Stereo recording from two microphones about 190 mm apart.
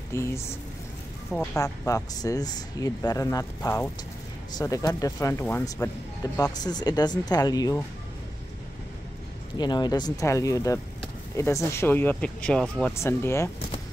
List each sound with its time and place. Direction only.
0.1 s speech: 15° left (ahead or behind)
1.6 s speech: 15° left (ahead or behind)
9.6 s speech: 20° left (ahead or behind)